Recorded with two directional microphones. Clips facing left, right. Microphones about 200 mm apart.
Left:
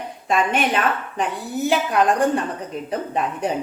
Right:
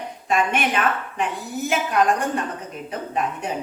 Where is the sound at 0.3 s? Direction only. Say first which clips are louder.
Left 2 dB; 35° left (ahead or behind).